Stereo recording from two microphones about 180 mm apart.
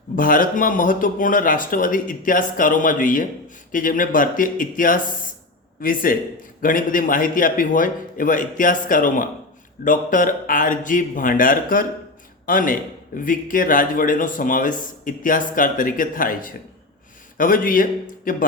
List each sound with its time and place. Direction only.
0.2 s a man's voice: 50° left (ahead or behind)